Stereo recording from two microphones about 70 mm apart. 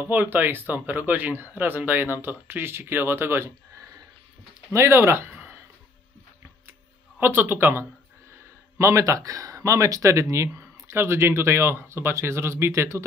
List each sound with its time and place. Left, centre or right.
0.0 s speech: right
4.7 s speech: right
7.2 s speech: right
8.7 s speech: right